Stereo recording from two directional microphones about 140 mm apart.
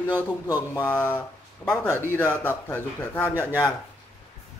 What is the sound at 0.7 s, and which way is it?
Speech, 15° left (ahead or behind).